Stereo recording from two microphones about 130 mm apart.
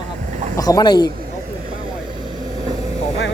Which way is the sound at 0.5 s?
30° left (ahead or behind).